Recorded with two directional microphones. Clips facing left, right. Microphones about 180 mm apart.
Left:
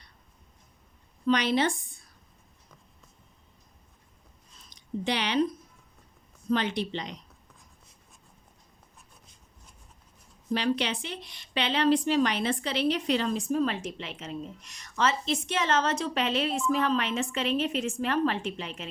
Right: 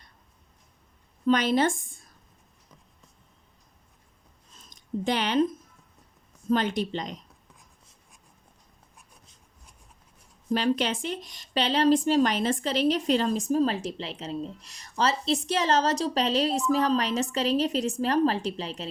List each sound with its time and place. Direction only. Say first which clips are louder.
1.3 s a woman's voice: right 2 dB; 45° right (ahead or behind)
4.7 s speech: right 3 dB; 45° right (ahead or behind)
6.5 s a woman's voice: right 2 dB; 45° right (ahead or behind)
10.5 s a woman's voice: right 3 dB; 45° right (ahead or behind)